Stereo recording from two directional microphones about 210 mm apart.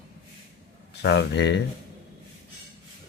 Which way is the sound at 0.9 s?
55° left (ahead or behind).